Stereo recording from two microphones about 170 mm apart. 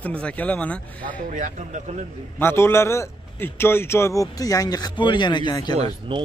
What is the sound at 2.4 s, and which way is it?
A man's voice, 15° left (ahead or behind).